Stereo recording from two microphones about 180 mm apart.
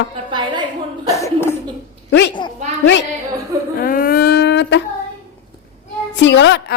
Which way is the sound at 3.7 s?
55° left (ahead or behind).